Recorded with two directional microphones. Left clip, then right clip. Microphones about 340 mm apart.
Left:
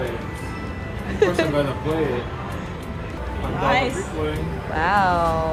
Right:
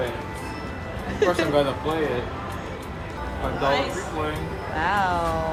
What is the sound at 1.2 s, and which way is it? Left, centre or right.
Speech, centre.